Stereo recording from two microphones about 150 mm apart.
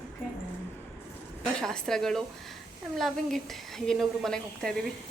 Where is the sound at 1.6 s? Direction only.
5° left (ahead or behind).